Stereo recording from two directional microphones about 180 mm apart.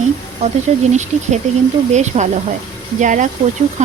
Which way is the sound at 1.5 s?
40° right (ahead or behind).